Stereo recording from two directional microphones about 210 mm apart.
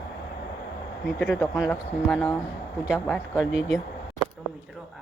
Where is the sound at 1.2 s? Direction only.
5° left (ahead or behind).